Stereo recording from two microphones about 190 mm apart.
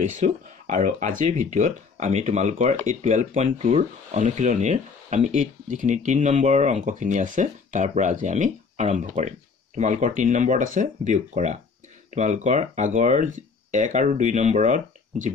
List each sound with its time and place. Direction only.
0.0 s speech: 40° right (ahead or behind)